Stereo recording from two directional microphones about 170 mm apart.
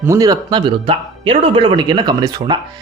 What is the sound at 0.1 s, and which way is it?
Speech, 20° right (ahead or behind).